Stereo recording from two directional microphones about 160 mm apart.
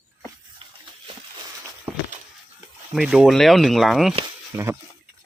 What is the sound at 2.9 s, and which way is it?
Speech, 5° right (ahead or behind).